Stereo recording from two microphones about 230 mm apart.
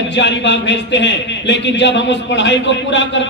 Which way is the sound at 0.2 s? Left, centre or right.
Left.